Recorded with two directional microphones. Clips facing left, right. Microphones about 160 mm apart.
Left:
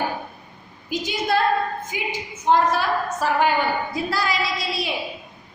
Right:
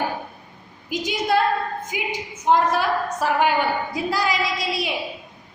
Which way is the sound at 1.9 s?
10° right (ahead or behind).